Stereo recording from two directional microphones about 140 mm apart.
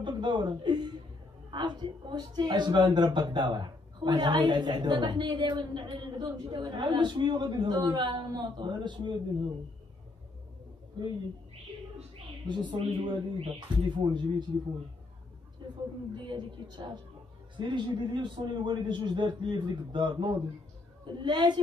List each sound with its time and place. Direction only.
0.0 s chuckle: 35° right (ahead or behind)
1.5 s a woman's voice: 35° right (ahead or behind)
11.0 s a woman's voice: 30° right (ahead or behind)
12.4 s a woman's voice: 35° right (ahead or behind)
16.2 s a woman's voice: 35° right (ahead or behind)